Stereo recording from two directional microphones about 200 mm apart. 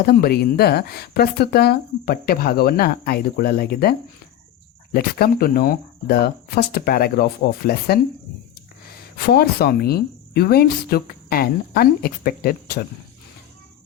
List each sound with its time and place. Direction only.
0.0 s speech: 50° left (ahead or behind)
4.9 s speech: 50° left (ahead or behind)
9.1 s speech: 50° left (ahead or behind)